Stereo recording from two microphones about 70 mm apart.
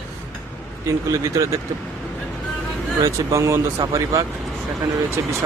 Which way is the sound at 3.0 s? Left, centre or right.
Right.